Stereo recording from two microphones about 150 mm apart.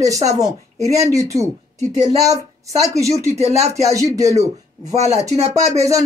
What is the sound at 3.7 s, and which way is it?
Speech, 20° right (ahead or behind).